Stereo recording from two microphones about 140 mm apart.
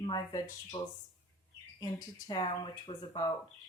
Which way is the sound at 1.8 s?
30° left (ahead or behind).